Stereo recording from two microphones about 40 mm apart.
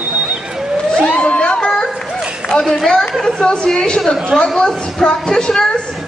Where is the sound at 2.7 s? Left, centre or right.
Centre.